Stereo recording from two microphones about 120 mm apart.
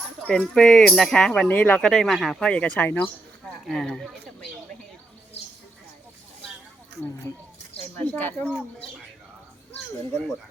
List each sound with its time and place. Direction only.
0.3 s speech: 5° left (ahead or behind)
1.9 s speech: centre (ahead or behind)
3.6 s speech: 5° left (ahead or behind)
7.9 s speech: 10° left (ahead or behind)